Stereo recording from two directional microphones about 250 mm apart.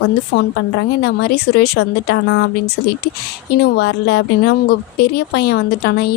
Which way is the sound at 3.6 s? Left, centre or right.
Left.